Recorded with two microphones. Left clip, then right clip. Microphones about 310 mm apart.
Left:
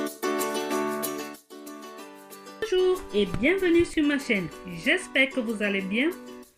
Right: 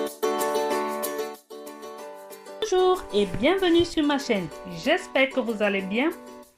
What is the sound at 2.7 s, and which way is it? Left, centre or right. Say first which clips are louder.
Speech: right 2 dB; right.